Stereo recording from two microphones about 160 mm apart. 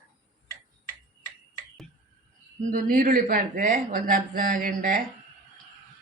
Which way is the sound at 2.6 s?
60° right (ahead or behind).